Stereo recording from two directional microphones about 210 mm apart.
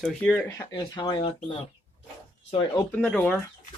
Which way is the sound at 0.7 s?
20° left (ahead or behind).